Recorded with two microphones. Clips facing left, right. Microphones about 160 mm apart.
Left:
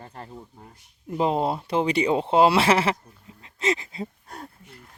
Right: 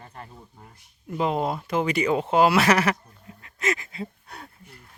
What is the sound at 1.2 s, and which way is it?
Speech, 30° left (ahead or behind).